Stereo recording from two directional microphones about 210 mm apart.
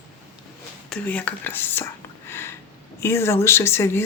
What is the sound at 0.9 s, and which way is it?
Speech, 5° left (ahead or behind).